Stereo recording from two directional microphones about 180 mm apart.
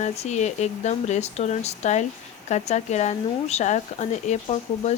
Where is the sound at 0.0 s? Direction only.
40° left (ahead or behind).